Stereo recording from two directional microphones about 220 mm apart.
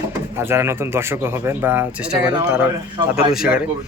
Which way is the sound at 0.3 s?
10° right (ahead or behind).